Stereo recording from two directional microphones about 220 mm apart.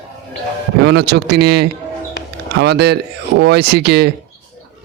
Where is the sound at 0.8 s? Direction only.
50° right (ahead or behind).